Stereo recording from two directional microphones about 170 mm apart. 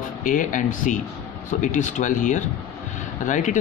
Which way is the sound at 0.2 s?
50° left (ahead or behind).